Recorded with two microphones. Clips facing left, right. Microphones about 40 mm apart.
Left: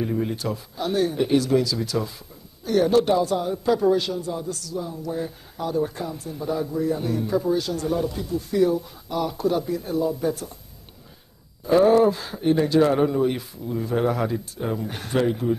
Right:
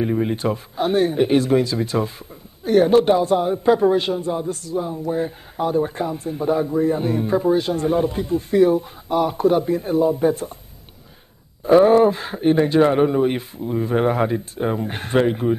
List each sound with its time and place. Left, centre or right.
0.0 s speech: right
11.6 s speech: right